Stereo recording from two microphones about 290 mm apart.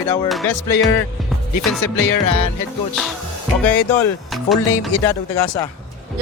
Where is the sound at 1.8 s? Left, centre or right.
Left.